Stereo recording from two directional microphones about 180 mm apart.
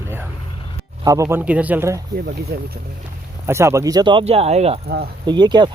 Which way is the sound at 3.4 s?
15° right (ahead or behind).